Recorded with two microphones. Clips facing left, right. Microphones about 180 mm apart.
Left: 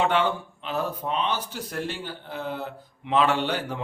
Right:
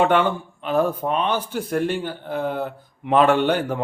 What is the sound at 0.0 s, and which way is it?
A man's voice, 55° right (ahead or behind).